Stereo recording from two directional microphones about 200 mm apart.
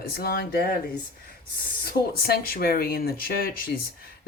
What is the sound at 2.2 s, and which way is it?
A man's voice, 50° left (ahead or behind).